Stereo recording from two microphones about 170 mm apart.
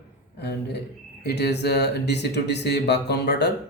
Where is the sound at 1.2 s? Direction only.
75° left (ahead or behind).